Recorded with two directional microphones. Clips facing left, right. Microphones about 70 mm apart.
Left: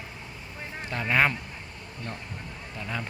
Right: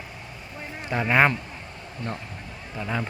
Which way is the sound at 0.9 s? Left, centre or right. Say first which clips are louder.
Right 4 dB; right.